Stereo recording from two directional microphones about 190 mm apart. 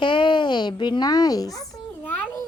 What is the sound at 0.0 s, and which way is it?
A child's voice, 25° left (ahead or behind).